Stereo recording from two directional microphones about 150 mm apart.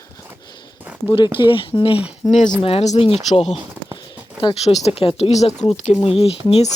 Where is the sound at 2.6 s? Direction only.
40° left (ahead or behind).